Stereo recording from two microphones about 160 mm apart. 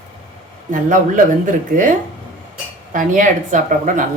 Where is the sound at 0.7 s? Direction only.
55° right (ahead or behind).